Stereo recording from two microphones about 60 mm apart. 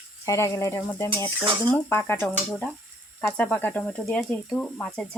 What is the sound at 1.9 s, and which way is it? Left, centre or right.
Speech, left.